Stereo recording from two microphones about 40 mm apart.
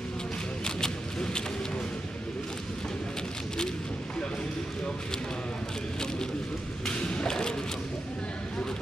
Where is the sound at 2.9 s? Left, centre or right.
Centre.